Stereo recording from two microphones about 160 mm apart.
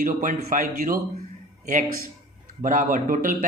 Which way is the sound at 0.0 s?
55° right (ahead or behind).